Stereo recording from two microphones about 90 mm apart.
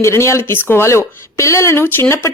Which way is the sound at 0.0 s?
30° left (ahead or behind).